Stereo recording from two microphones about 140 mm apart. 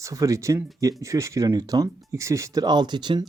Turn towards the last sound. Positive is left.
turn(degrees=-30)  # may be behind; listen again after turning